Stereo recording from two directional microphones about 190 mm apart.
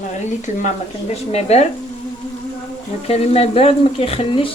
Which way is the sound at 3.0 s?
30° left (ahead or behind).